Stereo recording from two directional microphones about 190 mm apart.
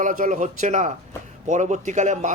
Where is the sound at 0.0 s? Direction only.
45° right (ahead or behind).